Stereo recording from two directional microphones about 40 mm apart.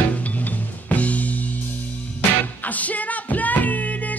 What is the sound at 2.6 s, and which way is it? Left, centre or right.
Music, left.